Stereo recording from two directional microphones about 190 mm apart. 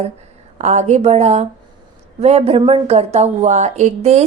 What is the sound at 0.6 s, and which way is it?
A woman's voice, 35° right (ahead or behind).